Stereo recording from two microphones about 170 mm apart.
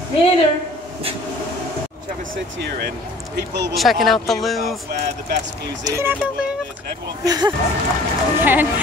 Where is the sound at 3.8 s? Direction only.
Centre (ahead or behind).